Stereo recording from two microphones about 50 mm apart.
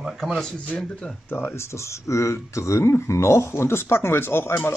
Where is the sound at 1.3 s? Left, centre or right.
Left.